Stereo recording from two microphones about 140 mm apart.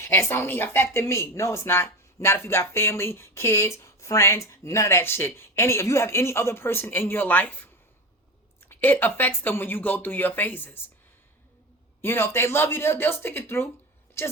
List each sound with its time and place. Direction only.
0.0 s a woman's voice: 20° left (ahead or behind)
12.0 s speech: 15° left (ahead or behind)